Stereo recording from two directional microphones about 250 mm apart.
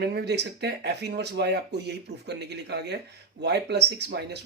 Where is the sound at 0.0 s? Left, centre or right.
Right.